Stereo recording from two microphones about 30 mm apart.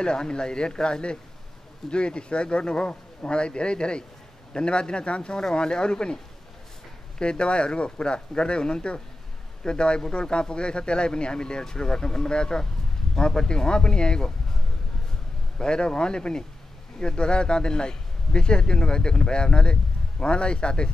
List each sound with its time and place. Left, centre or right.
0.0 s a man's voice: left
7.2 s a man's voice: left
15.6 s a man's voice: left